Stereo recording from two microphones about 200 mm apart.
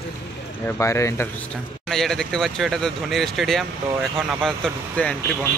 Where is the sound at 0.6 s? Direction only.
15° left (ahead or behind).